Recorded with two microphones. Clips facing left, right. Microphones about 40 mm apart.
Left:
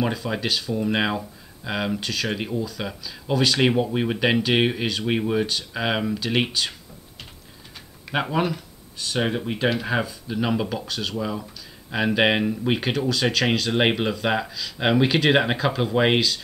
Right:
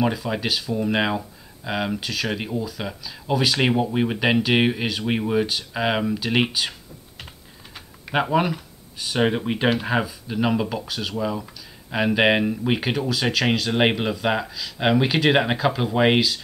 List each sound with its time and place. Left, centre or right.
0.0 s speech: centre
8.1 s speech: centre
9.8 s speech: centre